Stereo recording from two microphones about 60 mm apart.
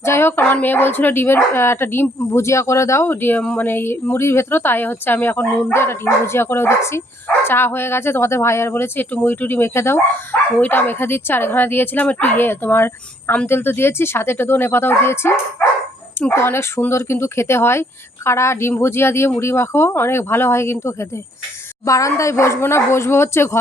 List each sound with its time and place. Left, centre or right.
0.0 s speech: left
3.1 s speech: left
5.7 s speech: left
10.6 s speech: left
21.8 s speech: left